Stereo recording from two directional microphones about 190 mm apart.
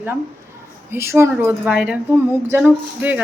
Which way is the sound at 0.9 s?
15° right (ahead or behind).